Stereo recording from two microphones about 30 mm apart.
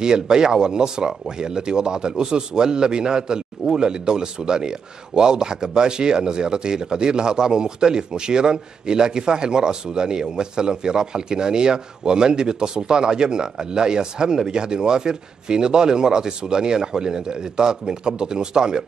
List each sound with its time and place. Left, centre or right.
0.0 s a man's voice: right